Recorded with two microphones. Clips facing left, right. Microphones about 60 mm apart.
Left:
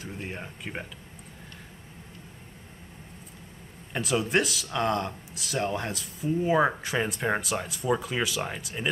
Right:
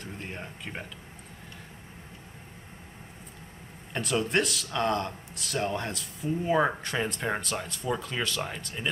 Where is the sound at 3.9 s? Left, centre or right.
Centre.